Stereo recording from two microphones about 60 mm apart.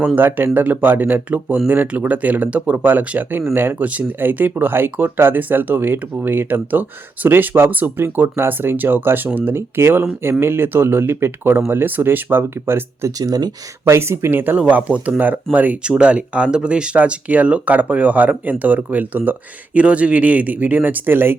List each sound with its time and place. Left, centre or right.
0.2 s speech: right
13.1 s speech: right
13.8 s speech: right